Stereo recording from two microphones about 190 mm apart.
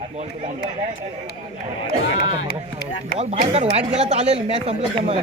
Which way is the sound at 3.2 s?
35° right (ahead or behind).